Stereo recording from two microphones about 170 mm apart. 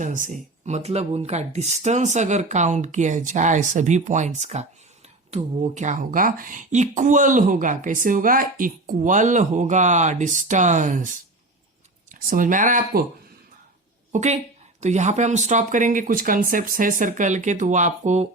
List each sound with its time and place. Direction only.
0.0 s speech: 50° right (ahead or behind)
14.1 s a woman's voice: 45° right (ahead or behind)